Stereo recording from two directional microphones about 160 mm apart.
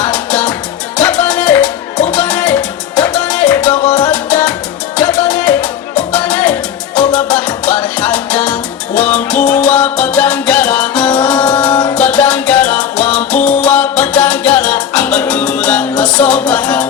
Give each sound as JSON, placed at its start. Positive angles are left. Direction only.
{"t": 0.0, "sound": "music", "side_deg": 5}
{"t": 4.0, "sound": "salsa music", "side_deg": 5}
{"t": 4.9, "sound": "music", "side_deg": 5}